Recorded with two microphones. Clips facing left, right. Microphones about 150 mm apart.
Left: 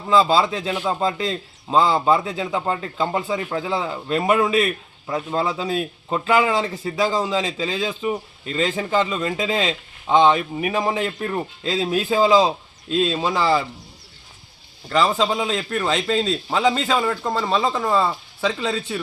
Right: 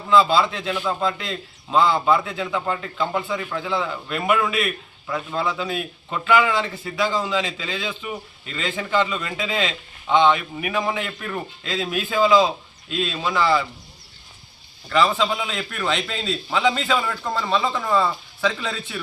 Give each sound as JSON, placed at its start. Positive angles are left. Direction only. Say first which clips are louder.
{"t": 0.1, "sound": "a man's voice", "louder": "left 1 dB", "side_deg": 35}
{"t": 14.9, "sound": "a man's voice", "louder": "left 1 dB", "side_deg": 40}